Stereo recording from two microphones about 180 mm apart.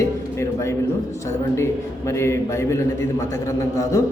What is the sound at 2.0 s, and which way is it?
A man's voice, 15° left (ahead or behind).